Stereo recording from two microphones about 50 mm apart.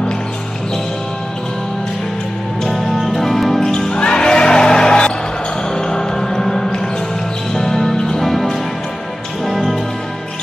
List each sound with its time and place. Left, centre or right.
2.6 s music: centre
3.7 s music: centre